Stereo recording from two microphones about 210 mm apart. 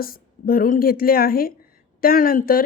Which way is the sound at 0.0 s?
45° left (ahead or behind).